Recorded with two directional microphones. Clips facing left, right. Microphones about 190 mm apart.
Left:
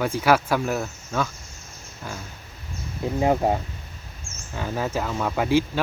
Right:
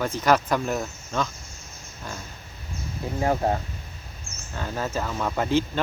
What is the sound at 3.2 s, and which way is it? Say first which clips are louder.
Speech: left 2 dB; 15° left (ahead or behind).